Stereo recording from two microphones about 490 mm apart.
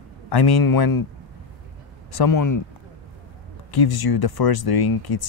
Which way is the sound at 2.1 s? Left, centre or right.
Left.